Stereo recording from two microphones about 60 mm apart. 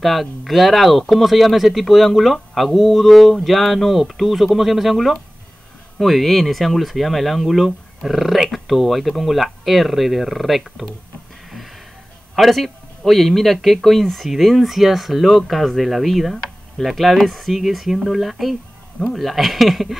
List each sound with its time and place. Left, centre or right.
0.0 s speech: centre
12.4 s speech: centre